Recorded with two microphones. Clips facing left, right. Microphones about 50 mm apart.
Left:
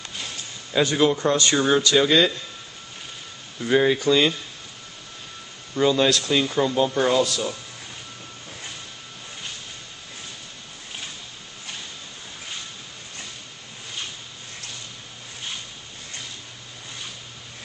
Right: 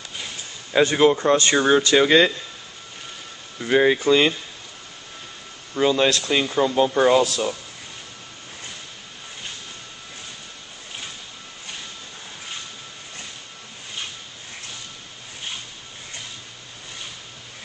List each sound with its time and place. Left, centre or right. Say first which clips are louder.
0.8 s speech: right 3 dB; right
3.5 s speech: right 2 dB; centre
5.8 s speech: even; centre